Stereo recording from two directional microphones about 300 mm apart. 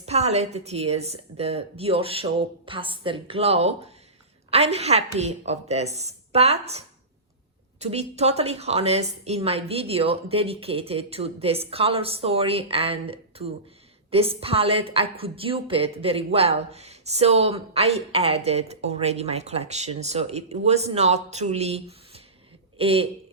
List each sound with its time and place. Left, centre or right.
0.0 s a woman's voice: right